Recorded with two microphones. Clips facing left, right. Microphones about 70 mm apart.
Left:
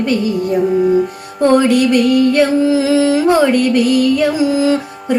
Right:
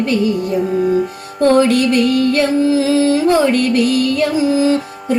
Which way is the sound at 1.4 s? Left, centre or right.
Centre.